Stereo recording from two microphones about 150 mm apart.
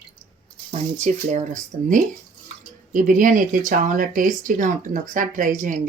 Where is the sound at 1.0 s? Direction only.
55° right (ahead or behind).